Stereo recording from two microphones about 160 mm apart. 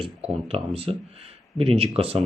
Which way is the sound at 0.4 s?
35° right (ahead or behind).